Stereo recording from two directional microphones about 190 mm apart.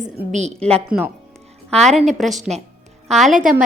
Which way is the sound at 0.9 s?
5° right (ahead or behind).